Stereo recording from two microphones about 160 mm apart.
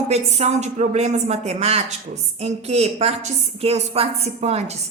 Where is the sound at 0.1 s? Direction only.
40° right (ahead or behind).